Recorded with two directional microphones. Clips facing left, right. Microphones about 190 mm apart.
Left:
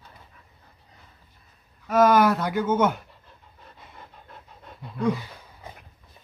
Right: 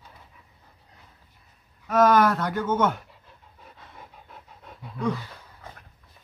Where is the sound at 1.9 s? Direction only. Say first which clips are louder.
Left 1 dB; 5° left (ahead or behind).